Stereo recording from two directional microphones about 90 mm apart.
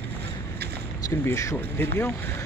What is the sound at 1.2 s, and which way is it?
Speech, 30° left (ahead or behind).